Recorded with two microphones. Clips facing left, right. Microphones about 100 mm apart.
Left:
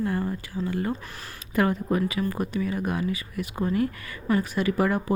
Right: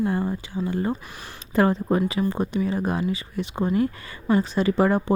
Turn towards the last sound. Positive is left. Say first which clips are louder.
# right 4 dB
turn(degrees=-30)  # may be behind; listen again after turning